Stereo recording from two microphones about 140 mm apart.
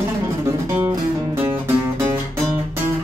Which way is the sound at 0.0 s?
20° right (ahead or behind).